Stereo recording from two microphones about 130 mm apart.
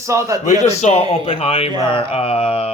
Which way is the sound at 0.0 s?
25° right (ahead or behind).